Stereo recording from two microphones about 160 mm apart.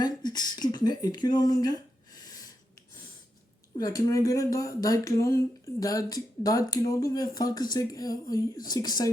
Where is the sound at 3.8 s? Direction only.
25° left (ahead or behind).